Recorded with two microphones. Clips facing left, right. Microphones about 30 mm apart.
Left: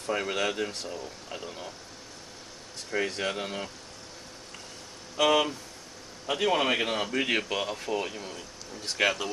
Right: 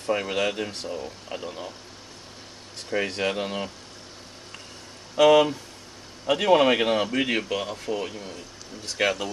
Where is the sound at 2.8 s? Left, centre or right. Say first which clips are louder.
Right 4 dB; right.